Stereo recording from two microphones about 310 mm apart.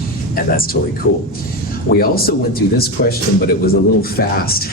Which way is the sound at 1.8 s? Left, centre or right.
Left.